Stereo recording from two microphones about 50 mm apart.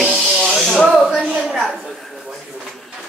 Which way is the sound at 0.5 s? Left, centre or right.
Centre.